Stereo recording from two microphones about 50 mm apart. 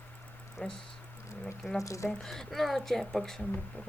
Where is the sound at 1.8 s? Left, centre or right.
Left.